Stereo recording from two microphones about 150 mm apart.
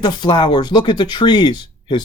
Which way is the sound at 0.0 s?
30° left (ahead or behind).